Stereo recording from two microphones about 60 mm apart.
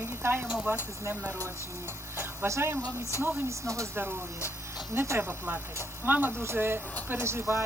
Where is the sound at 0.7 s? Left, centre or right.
Right.